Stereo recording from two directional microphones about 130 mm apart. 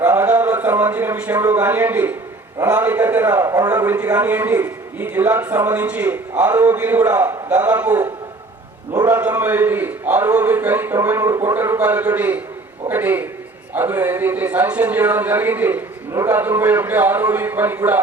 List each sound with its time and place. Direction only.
0.0 s a sound: 15° right (ahead or behind)
1.5 s a man's voice: 10° right (ahead or behind)
3.4 s a man's voice: 30° right (ahead or behind)
3.8 s a man's voice: 15° right (ahead or behind)